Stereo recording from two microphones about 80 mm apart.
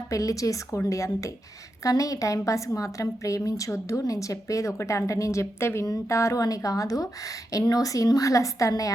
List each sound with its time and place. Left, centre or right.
0.1 s a woman's voice: left